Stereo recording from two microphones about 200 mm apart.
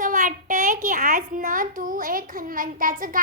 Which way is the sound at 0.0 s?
40° right (ahead or behind).